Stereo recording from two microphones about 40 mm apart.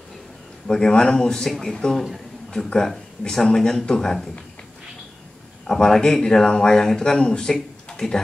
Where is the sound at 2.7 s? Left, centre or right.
Centre.